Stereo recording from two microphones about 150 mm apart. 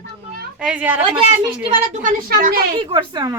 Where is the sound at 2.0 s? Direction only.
75° right (ahead or behind).